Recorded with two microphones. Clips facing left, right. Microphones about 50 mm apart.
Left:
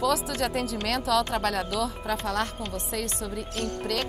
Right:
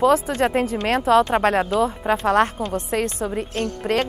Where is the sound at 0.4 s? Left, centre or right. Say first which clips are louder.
Right 8 dB; right.